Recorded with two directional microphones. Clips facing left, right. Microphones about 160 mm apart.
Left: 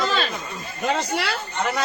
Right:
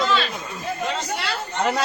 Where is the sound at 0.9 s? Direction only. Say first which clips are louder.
Left 3 dB; 70° left (ahead or behind).